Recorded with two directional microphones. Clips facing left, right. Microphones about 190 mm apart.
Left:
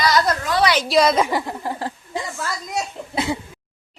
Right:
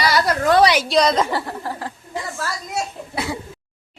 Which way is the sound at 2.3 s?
20° left (ahead or behind).